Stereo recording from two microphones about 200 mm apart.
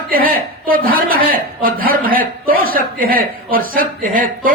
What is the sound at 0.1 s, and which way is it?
A woman's voice, 45° right (ahead or behind).